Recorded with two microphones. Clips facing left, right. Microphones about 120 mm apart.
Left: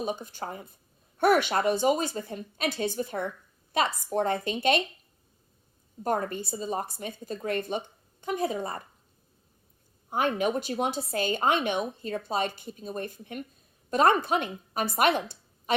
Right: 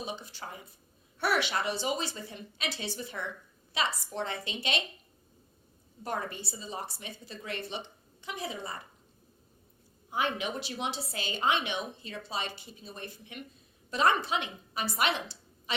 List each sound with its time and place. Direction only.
0.0 s a woman's voice: 50° left (ahead or behind)
6.0 s a woman's voice: 45° left (ahead or behind)
10.1 s a woman's voice: 50° left (ahead or behind)